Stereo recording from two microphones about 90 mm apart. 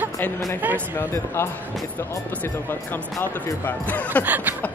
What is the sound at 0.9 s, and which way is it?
Speech, 30° left (ahead or behind).